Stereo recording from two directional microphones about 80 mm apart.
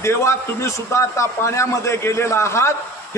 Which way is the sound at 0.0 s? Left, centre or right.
Left.